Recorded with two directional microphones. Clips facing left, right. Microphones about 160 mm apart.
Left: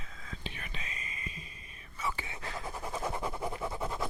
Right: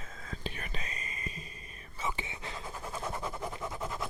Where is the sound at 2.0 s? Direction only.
20° right (ahead or behind).